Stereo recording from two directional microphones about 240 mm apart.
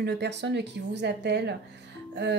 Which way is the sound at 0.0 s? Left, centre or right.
Right.